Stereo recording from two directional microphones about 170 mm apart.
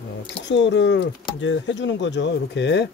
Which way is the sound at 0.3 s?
90° left.